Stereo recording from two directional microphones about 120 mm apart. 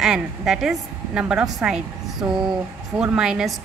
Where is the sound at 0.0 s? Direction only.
5° right (ahead or behind).